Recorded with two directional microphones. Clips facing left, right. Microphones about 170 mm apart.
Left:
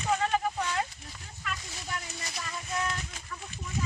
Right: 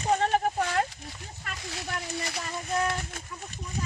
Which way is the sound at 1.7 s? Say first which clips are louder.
Right 5 dB; 65° right (ahead or behind).